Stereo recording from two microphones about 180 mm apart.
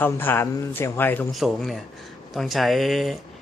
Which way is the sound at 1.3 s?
Centre (ahead or behind).